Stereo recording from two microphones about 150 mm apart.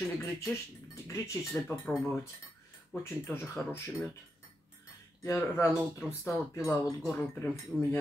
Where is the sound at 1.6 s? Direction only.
10° left (ahead or behind).